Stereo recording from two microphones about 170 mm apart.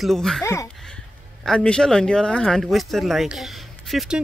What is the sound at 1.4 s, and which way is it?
Speech, 5° left (ahead or behind).